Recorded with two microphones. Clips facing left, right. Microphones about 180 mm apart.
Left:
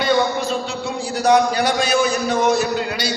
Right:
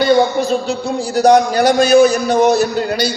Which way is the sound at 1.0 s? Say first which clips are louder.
Right 5 dB; 40° right (ahead or behind).